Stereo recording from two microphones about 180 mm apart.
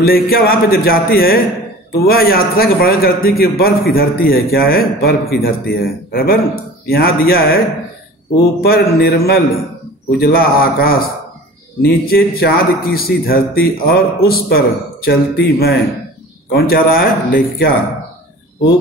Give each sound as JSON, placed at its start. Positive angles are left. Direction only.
{"t": 0.0, "sound": "a man's voice", "side_deg": 55}